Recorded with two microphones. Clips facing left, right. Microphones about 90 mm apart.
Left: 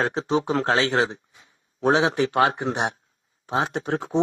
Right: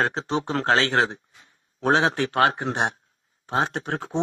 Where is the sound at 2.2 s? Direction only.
20° left (ahead or behind).